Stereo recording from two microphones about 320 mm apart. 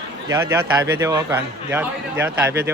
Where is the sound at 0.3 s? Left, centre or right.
Centre.